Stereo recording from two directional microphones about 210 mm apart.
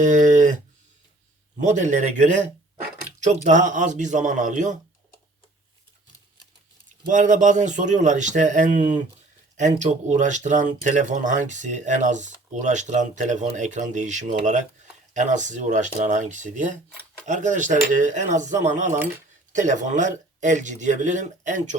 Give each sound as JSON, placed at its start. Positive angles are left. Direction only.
{"t": 0.0, "sound": "a sound", "side_deg": -35}
{"t": 1.6, "sound": "speech", "side_deg": -35}
{"t": 7.1, "sound": "speech", "side_deg": -35}